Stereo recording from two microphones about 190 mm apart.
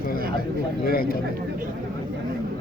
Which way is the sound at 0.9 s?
50° left (ahead or behind).